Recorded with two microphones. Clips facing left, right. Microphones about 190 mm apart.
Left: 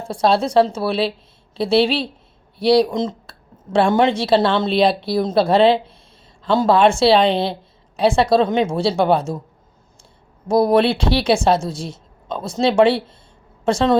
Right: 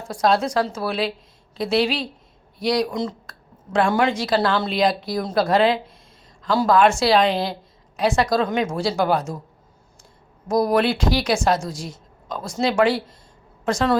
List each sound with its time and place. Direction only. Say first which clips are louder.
0.1 s speech: left 3 dB; 30° left (ahead or behind)
10.5 s speech: left 4 dB; 30° left (ahead or behind)